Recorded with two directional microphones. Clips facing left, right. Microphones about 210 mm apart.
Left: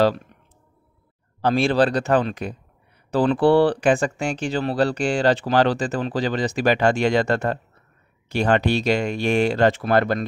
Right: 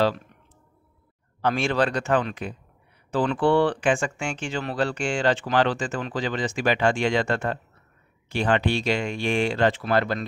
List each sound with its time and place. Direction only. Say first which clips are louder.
1.4 s speech: left 5 dB; 35° left (ahead or behind); by 10.2 s 50° left (ahead or behind)